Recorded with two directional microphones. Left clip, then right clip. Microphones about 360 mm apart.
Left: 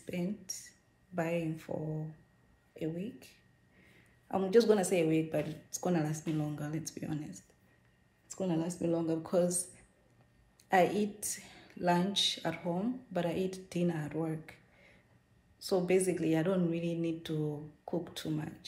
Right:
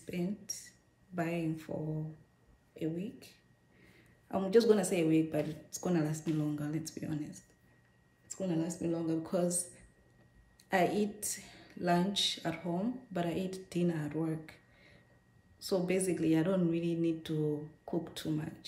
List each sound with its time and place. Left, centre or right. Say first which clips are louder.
0.0 s a sound: even; centre
2.7 s a woman's voice: even; centre
8.5 s speech: even; left
8.8 s a woman's voice: left 2 dB; centre
10.7 s a woman's voice: left 2 dB; centre